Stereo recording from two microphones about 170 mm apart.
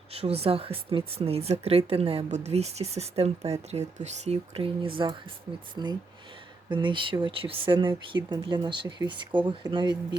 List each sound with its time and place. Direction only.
0.1 s speech: 35° right (ahead or behind)